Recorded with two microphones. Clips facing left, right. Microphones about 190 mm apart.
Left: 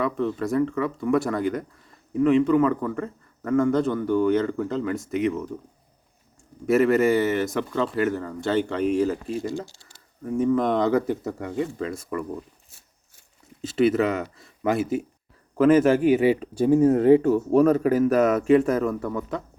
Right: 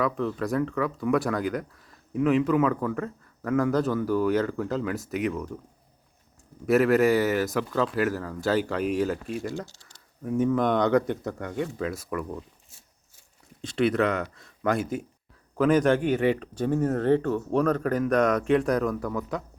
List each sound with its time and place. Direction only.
0.0 s speech: centre (ahead or behind)
6.7 s speech: centre (ahead or behind)
9.5 s speech: 15° left (ahead or behind)
9.8 s speech: centre (ahead or behind)
13.6 s speech: 5° left (ahead or behind)